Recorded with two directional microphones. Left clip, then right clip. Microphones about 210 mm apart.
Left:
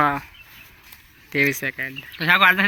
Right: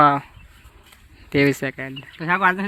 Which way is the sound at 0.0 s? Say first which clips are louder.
Right 5 dB; 45° right (ahead or behind).